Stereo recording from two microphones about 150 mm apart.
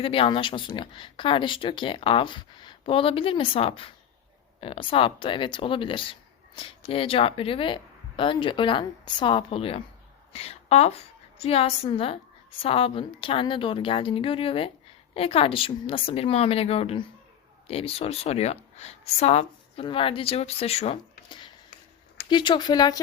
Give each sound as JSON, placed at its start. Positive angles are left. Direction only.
{"t": 0.0, "sound": "a woman's voice", "side_deg": 40}